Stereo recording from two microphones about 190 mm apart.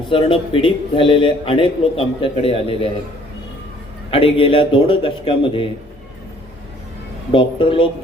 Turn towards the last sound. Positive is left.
turn(degrees=25)  # may be behind; listen again after turning